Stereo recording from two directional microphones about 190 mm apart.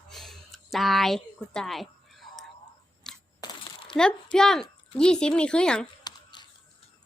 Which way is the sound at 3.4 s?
25° left (ahead or behind).